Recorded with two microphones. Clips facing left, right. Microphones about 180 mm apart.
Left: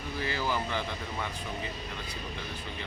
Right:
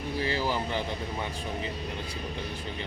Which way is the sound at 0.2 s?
30° right (ahead or behind).